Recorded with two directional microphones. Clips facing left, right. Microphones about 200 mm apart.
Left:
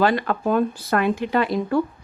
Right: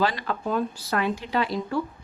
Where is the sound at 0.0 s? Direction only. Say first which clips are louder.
Left 6 dB; 55° left (ahead or behind).